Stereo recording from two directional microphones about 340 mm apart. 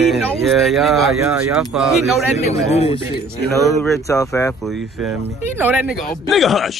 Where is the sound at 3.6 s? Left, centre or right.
Centre.